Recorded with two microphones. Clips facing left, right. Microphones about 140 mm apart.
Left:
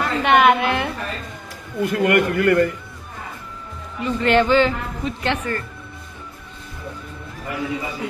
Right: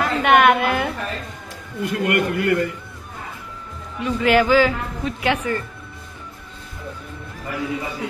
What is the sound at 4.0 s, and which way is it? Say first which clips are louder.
A man's voice: even; 5° right (ahead or behind).